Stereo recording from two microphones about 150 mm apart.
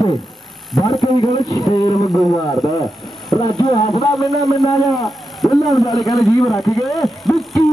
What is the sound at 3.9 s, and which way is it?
A man's voice, centre (ahead or behind).